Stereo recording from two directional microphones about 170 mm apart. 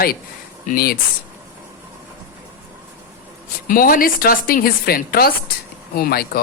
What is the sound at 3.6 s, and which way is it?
Speech, 55° left (ahead or behind).